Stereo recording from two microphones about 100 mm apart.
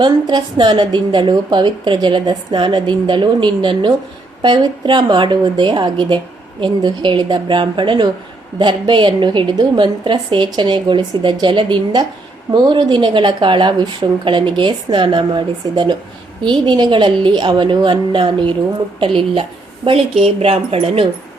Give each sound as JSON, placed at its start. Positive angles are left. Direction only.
{"t": 0.0, "sound": "a woman's voice", "side_deg": -50}